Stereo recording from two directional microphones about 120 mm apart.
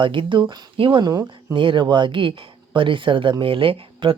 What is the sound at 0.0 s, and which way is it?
Speech, 45° right (ahead or behind).